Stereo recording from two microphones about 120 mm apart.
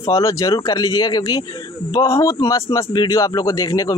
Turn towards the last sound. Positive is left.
turn(degrees=30)  # may be behind; listen again after turning